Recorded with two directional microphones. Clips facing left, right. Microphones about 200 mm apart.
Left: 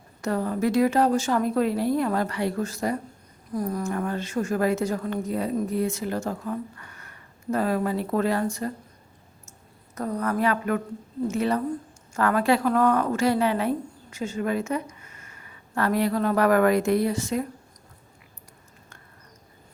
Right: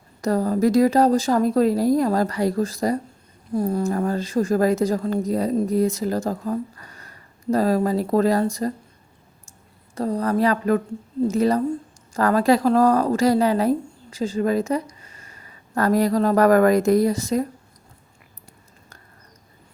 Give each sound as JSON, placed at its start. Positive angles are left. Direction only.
{"t": 0.2, "sound": "a woman's voice", "side_deg": -40}
{"t": 9.9, "sound": "a woman's voice", "side_deg": -30}